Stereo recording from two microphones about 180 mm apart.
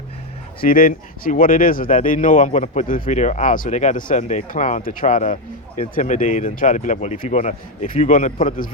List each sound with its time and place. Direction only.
0.6 s speech: 50° left (ahead or behind)